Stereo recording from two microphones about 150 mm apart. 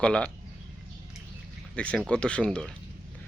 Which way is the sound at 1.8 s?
5° left (ahead or behind).